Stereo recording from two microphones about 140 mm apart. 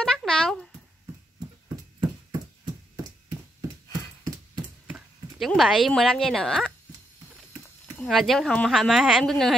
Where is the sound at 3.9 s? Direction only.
30° right (ahead or behind).